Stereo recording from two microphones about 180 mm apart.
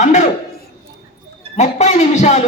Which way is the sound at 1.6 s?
40° left (ahead or behind).